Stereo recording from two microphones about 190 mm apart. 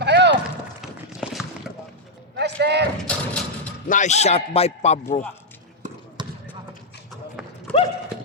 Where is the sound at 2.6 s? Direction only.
60° right (ahead or behind).